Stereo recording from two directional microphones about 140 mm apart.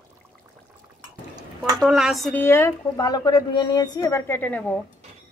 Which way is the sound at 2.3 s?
15° left (ahead or behind).